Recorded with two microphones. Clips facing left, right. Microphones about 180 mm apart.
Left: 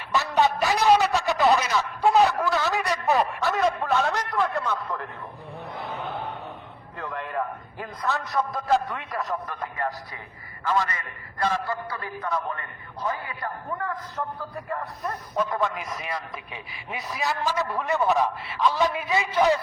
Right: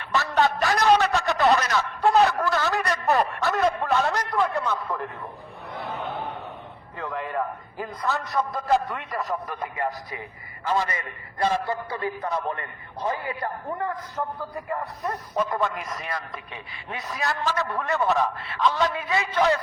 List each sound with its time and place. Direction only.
0.1 s a sound: centre (ahead or behind)
9.7 s a man's voice: 15° right (ahead or behind)
15.0 s a man's voice: centre (ahead or behind)
19.0 s a man's voice: 15° left (ahead or behind)